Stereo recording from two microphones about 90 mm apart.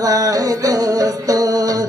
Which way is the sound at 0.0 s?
45° right (ahead or behind).